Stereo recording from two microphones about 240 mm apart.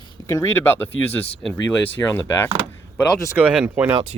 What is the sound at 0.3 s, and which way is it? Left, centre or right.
Speech, centre.